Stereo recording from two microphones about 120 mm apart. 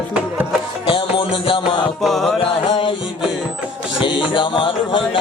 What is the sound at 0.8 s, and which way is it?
Music, 45° left (ahead or behind).